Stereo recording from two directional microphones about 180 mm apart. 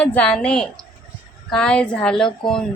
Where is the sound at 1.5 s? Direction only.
5° left (ahead or behind).